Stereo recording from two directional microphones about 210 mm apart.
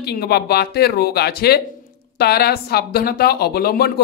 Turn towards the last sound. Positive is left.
turn(degrees=45)  # may be behind; listen again after turning